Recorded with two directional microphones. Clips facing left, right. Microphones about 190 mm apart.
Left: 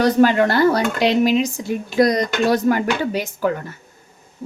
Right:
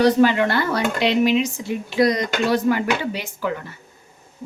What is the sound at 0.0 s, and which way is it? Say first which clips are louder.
A woman's voice: left 1 dB; 45° left (ahead or behind).